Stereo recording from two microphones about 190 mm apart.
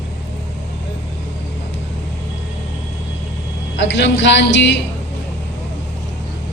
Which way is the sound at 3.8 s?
70° left (ahead or behind).